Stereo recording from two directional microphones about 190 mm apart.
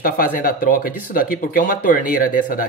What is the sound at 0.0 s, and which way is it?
Speech, 50° left (ahead or behind).